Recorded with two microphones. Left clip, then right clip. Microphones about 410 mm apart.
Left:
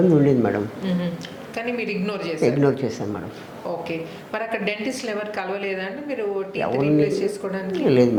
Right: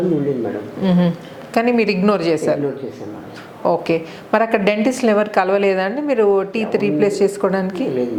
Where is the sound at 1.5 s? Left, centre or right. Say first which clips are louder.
Right 10 dB; right.